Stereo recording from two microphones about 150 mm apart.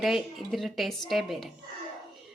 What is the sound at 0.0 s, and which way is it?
A woman's voice, centre (ahead or behind).